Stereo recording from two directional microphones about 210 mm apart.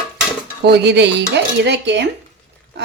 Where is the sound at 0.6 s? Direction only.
50° right (ahead or behind).